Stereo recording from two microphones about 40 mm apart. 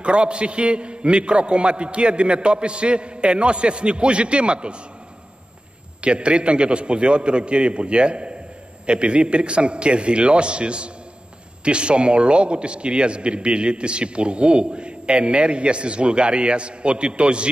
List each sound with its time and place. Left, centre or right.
0.0 s a man's voice: right
5.9 s a man's voice: right